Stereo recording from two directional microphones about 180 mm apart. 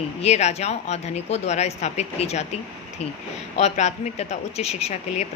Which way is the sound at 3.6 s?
40° left (ahead or behind).